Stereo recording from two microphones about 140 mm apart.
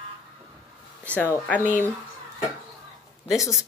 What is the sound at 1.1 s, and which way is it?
Speech, 10° left (ahead or behind).